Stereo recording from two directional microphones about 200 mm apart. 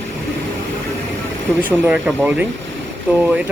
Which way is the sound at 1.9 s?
10° right (ahead or behind).